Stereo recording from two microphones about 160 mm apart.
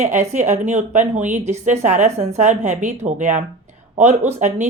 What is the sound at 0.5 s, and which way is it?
Speech, 50° right (ahead or behind).